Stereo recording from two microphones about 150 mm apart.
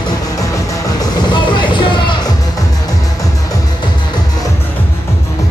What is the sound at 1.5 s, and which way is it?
Vehicle, 30° left (ahead or behind).